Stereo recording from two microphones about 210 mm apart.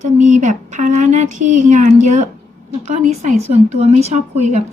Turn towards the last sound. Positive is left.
turn(degrees=-35)  # may be behind; listen again after turning